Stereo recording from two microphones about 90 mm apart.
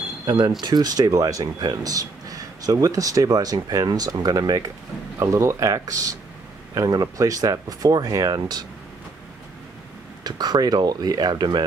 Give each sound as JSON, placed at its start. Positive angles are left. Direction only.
{"t": 0.6, "sound": "speech", "side_deg": -50}
{"t": 10.2, "sound": "speech", "side_deg": -50}